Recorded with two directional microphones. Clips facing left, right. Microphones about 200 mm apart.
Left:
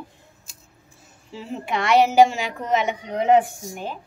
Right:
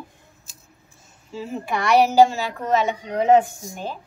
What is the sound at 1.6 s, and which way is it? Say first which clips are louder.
A woman's voice: even; 25° left (ahead or behind).